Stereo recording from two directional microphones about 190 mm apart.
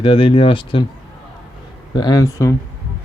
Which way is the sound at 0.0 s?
30° left (ahead or behind).